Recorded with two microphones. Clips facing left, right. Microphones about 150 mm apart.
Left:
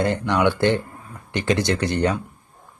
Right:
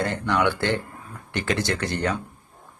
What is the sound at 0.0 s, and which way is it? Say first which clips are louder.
Speech: left 3 dB; 20° left (ahead or behind).